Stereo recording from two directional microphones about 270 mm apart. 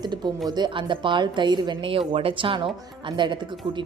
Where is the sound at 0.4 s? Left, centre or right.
Centre.